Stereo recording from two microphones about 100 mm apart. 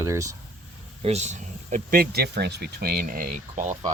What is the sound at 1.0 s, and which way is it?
Speech, 90° right.